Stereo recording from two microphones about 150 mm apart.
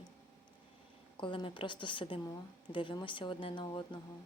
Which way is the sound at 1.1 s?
35° left (ahead or behind).